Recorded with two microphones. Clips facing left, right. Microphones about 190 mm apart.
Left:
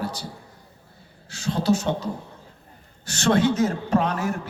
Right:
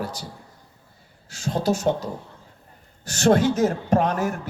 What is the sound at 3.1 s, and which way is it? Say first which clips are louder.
Speech: right 2 dB; 45° right (ahead or behind).